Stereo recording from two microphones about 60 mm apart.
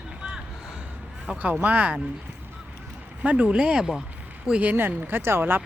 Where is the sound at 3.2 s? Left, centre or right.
Right.